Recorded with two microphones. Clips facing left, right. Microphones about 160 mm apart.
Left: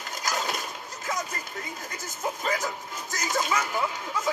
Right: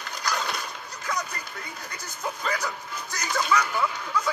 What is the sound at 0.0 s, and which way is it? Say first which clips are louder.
Fowl: even; 45° left (ahead or behind).